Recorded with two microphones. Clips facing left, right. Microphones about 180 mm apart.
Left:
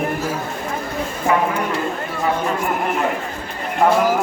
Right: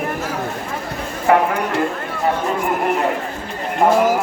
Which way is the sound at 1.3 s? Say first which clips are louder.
Right 4 dB; 60° right (ahead or behind).